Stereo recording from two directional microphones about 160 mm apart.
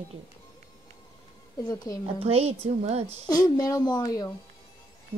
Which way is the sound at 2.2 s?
40° right (ahead or behind).